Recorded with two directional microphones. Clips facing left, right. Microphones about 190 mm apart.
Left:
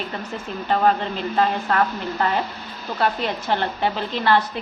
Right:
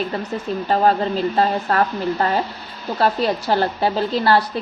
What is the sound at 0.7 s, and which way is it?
A woman's voice, 35° right (ahead or behind).